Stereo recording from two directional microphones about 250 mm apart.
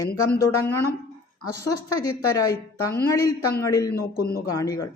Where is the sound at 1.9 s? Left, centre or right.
Centre.